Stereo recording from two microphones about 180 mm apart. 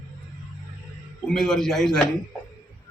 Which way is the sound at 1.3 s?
5° left (ahead or behind).